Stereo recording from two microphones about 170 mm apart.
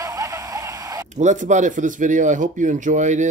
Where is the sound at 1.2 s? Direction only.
45° right (ahead or behind).